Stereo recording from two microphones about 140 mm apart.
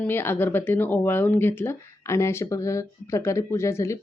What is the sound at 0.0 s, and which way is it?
Speech, 15° left (ahead or behind).